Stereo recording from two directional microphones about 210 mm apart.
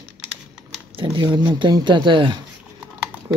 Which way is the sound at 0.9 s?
20° right (ahead or behind).